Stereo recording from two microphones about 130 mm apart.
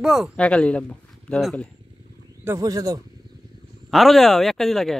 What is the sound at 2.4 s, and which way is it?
Speech, 25° right (ahead or behind).